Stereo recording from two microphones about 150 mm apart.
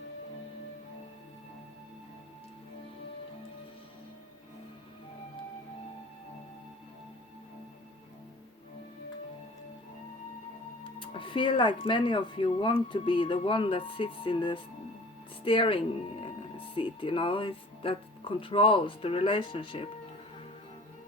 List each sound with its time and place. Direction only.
10.8 s speech: 35° left (ahead or behind)